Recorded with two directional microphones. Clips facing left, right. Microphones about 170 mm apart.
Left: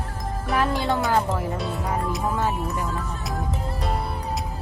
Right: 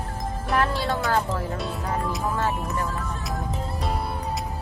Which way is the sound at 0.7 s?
20° left (ahead or behind).